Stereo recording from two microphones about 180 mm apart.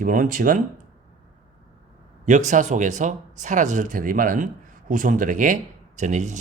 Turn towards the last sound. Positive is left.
turn(degrees=-40)  # may be behind; listen again after turning